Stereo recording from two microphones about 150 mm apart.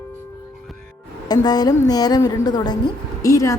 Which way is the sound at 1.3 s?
25° left (ahead or behind).